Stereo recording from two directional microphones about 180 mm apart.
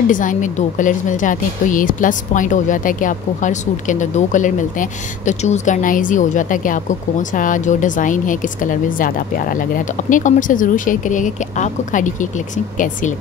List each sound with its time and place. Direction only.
0.1 s speech: 45° left (ahead or behind)